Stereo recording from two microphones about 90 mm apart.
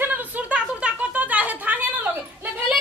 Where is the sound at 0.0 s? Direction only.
20° right (ahead or behind).